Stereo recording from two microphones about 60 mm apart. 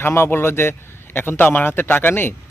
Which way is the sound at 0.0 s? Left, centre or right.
Left.